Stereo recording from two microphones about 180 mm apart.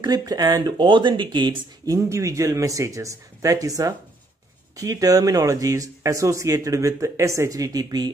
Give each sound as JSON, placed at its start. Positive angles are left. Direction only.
{"t": 0.0, "sound": "speech", "side_deg": -20}